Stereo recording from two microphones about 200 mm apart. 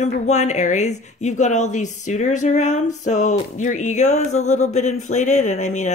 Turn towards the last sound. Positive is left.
turn(degrees=35)  # may be behind; listen again after turning